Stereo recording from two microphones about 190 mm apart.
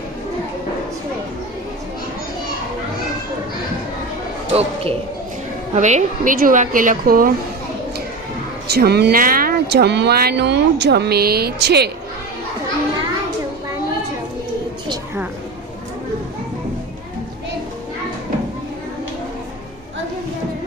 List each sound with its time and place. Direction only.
4.5 s a man's voice: 30° right (ahead or behind); by 7.3 s 45° right (ahead or behind)
8.6 s speech: 55° right (ahead or behind)